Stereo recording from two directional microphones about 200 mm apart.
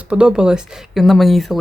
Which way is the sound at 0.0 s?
5° right (ahead or behind).